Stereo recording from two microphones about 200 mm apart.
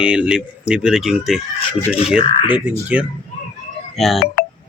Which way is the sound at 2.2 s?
25° left (ahead or behind).